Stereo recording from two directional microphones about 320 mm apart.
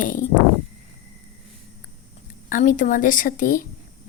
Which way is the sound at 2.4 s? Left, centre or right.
Left.